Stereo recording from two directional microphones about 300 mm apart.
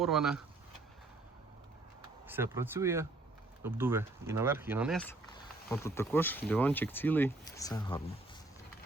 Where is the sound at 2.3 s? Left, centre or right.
Centre.